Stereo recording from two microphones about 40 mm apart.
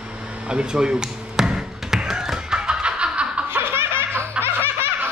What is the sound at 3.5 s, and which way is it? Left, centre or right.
Laughter, right.